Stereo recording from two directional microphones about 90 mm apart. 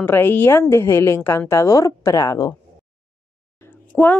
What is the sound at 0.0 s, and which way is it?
A woman's voice, 25° left (ahead or behind).